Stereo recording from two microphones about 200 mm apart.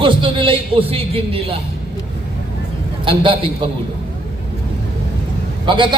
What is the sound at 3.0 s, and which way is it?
Speech, 25° right (ahead or behind).